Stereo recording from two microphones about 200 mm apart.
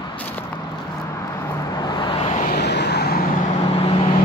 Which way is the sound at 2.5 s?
55° left (ahead or behind).